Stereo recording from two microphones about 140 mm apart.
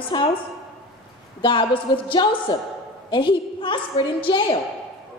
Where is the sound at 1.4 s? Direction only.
35° left (ahead or behind).